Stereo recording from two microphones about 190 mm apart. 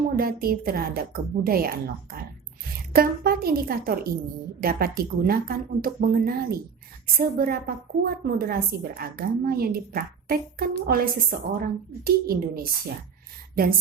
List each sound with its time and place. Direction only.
0.2 s a woman's voice: 50° right (ahead or behind)